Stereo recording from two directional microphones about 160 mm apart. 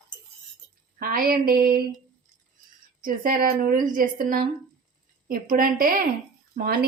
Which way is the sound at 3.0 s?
60° right (ahead or behind).